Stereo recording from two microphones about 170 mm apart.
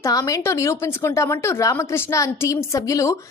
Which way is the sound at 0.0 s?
20° left (ahead or behind).